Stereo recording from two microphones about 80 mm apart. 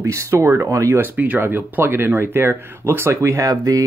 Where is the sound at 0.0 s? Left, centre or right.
Right.